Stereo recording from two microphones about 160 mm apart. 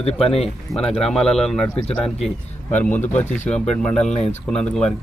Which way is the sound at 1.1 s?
5° left (ahead or behind).